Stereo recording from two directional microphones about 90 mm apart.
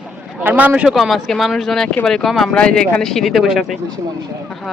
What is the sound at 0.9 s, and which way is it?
Speech, centre (ahead or behind).